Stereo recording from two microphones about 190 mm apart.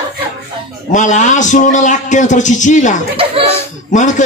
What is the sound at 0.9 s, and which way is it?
A man's voice, 40° left (ahead or behind).